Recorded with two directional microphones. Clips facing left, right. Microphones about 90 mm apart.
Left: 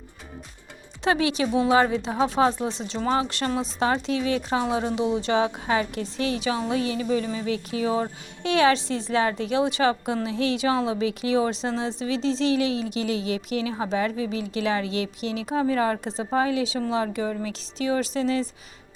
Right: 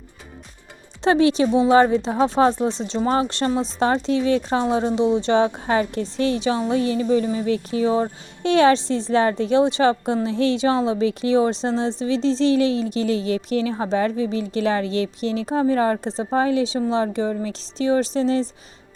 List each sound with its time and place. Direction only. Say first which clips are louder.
1.0 s speech: right 6 dB; 35° right (ahead or behind)